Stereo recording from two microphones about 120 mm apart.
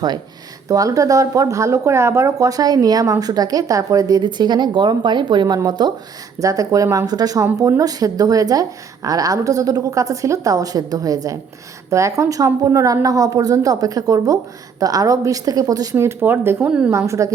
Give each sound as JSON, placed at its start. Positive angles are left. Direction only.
{"t": 0.7, "sound": "speech", "side_deg": -30}